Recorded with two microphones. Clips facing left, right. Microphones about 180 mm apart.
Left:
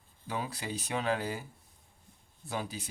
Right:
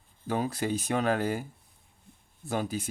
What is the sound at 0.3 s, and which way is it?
Speech, 45° right (ahead or behind).